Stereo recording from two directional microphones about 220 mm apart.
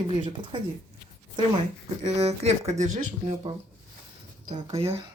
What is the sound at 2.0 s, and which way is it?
Speech, 30° right (ahead or behind).